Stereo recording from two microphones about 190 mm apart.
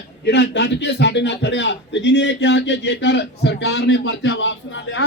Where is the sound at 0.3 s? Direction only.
65° left (ahead or behind).